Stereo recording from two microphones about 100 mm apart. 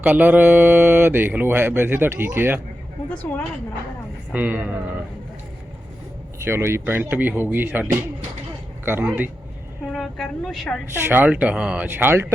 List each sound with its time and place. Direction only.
0.0 s speech: 15° right (ahead or behind)
3.3 s speech: 15° left (ahead or behind)
4.3 s speech: 15° right (ahead or behind)
6.4 s speech: 25° right (ahead or behind)
9.9 s a woman's voice: 5° left (ahead or behind)
11.0 s speech: 15° right (ahead or behind)